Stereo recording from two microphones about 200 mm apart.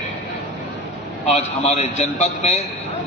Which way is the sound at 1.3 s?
30° left (ahead or behind).